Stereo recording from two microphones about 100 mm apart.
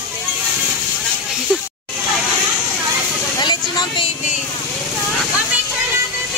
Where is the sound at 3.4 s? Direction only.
45° left (ahead or behind).